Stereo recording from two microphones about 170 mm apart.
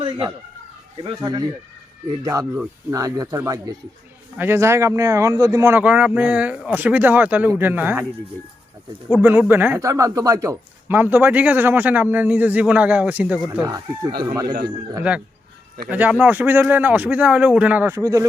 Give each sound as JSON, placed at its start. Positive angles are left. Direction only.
{"t": 1.0, "sound": "speech", "side_deg": -25}
{"t": 9.2, "sound": "speech", "side_deg": -10}
{"t": 13.6, "sound": "speech", "side_deg": -20}
{"t": 15.1, "sound": "speech", "side_deg": -5}